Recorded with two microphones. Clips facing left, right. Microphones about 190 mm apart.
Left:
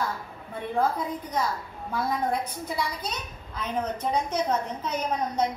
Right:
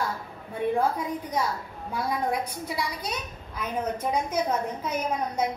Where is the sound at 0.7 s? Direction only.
15° right (ahead or behind).